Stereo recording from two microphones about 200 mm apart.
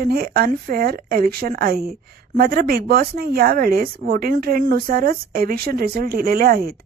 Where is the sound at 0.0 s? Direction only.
50° right (ahead or behind).